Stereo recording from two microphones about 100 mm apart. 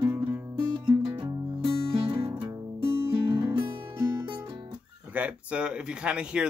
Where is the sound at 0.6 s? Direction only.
40° right (ahead or behind).